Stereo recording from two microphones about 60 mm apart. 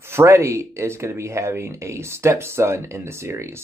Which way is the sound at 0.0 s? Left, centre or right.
Right.